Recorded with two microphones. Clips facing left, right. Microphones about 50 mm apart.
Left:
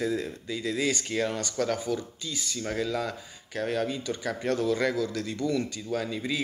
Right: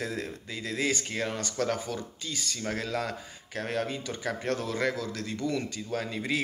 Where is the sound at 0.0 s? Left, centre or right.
Right.